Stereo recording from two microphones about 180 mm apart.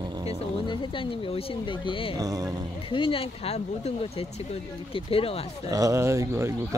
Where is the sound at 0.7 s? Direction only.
30° left (ahead or behind).